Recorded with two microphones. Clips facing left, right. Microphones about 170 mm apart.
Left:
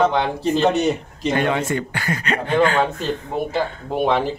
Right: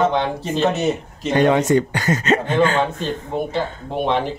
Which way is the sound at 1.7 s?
25° right (ahead or behind).